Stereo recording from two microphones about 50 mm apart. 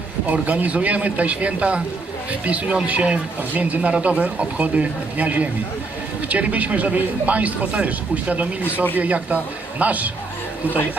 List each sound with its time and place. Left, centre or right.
0.4 s speech: right
8.6 s speech: left
9.0 s speech: right